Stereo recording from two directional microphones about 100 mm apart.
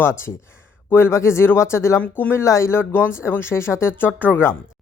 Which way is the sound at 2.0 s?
15° left (ahead or behind).